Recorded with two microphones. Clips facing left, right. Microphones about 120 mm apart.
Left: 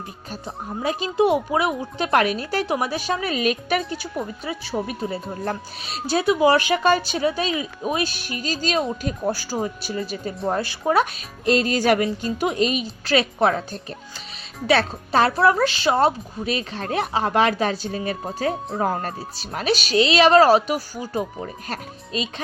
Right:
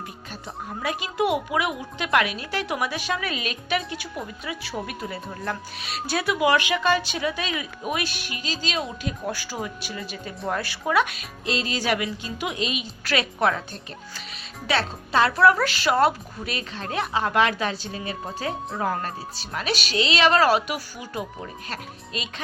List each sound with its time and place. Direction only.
0.8 s speech: 30° left (ahead or behind)
13.1 s speech: 30° left (ahead or behind)
14.7 s speech: 40° left (ahead or behind)